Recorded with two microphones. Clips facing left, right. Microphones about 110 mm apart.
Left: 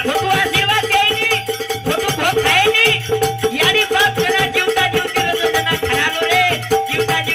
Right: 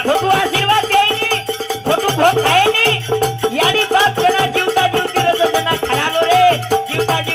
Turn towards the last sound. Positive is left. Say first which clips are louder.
# even
turn(degrees=-35)  # may be behind; listen again after turning